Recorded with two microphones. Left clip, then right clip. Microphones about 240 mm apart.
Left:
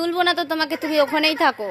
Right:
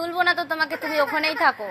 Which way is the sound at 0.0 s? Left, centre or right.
Left.